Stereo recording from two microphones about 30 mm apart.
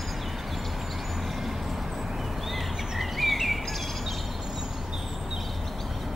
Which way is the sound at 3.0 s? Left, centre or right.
Centre.